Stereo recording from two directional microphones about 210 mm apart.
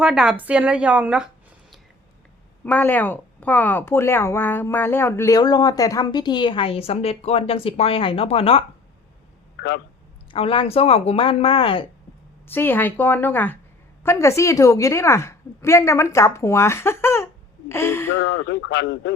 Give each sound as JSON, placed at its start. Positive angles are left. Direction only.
{"t": 0.0, "sound": "a woman's voice", "side_deg": 0}
{"t": 2.6, "sound": "speech", "side_deg": 10}
{"t": 10.3, "sound": "speech", "side_deg": 25}
{"t": 12.5, "sound": "speech", "side_deg": 10}
{"t": 18.3, "sound": "speech", "side_deg": 65}